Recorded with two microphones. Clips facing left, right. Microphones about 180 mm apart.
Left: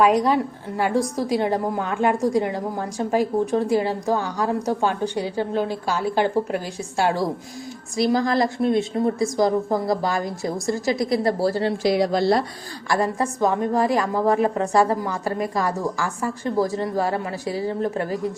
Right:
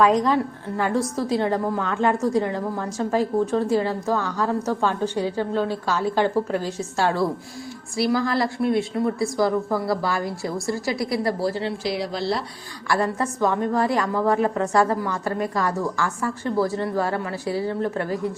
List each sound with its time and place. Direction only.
0.0 s a woman's voice: 10° left (ahead or behind); by 12.5 s 45° left (ahead or behind)
12.9 s a woman's voice: 15° left (ahead or behind)